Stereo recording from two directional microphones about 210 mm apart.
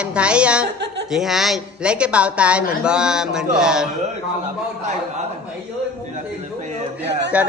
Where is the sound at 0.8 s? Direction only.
55° right (ahead or behind).